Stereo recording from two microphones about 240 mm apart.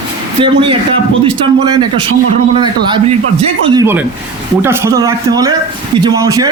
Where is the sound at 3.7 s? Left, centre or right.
Centre.